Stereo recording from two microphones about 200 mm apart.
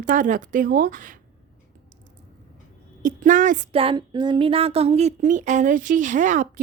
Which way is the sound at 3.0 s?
40° right (ahead or behind).